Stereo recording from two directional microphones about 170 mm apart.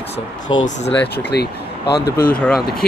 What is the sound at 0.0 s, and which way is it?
Speech, 35° left (ahead or behind).